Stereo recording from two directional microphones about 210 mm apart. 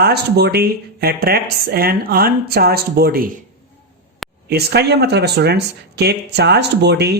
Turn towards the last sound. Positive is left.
turn(degrees=-50)  # may be behind; listen again after turning